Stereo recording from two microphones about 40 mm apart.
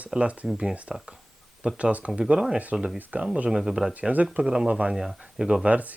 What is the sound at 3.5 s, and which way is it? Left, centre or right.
Speech, centre.